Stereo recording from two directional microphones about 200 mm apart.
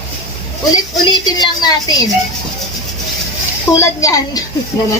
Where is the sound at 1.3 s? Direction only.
20° left (ahead or behind).